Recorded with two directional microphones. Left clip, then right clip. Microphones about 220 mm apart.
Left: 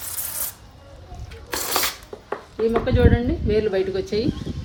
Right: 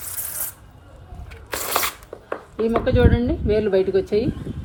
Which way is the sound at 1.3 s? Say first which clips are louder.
Right 1 dB; centre (ahead or behind).